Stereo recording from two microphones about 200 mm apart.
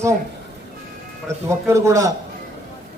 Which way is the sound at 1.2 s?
15° right (ahead or behind).